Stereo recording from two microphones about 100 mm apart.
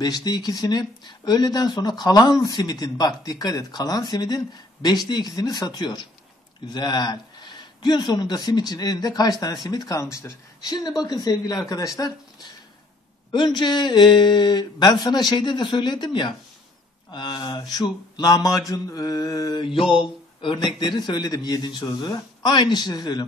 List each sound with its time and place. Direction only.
0.0 s speech: 45° left (ahead or behind)
2.4 s mantra: 40° left (ahead or behind)
4.8 s speech: 45° left (ahead or behind)
10.1 s mantra: 35° left (ahead or behind)
13.3 s speech: 50° left (ahead or behind)
17.1 s mantra: 50° left (ahead or behind)
19.8 s a sound: 5° right (ahead or behind)
20.4 s speech: 50° left (ahead or behind)